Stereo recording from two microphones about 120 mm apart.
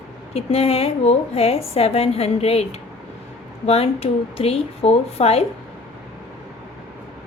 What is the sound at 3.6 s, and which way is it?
A woman's voice, 55° left (ahead or behind).